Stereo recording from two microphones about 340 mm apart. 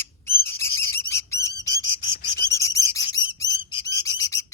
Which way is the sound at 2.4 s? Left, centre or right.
Centre.